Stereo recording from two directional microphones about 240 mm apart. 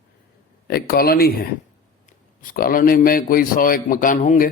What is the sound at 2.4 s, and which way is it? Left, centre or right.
Speech, left.